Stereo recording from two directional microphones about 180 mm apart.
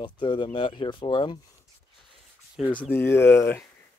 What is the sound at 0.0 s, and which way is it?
Speech, 25° left (ahead or behind).